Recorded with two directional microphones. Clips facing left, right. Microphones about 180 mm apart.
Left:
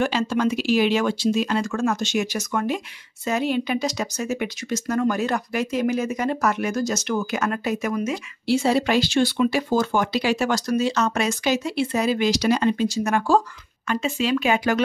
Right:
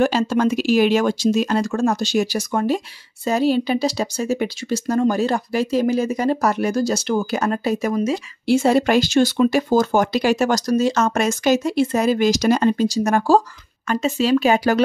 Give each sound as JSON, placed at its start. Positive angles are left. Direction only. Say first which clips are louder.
{"t": 0.0, "sound": "speech", "louder": "right 4 dB", "side_deg": -40}
{"t": 8.5, "sound": "speech", "louder": "right 4 dB", "side_deg": -50}